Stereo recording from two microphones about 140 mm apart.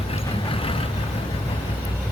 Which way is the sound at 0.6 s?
40° left (ahead or behind).